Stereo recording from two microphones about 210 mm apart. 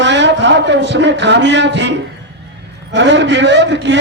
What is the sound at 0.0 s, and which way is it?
A man's voice, 55° right (ahead or behind).